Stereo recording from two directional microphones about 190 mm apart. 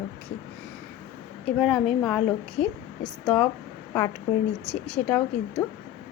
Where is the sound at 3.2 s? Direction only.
10° left (ahead or behind).